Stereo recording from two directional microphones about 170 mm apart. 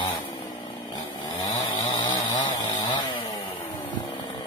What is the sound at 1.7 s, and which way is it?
Chainsaw, 25° left (ahead or behind).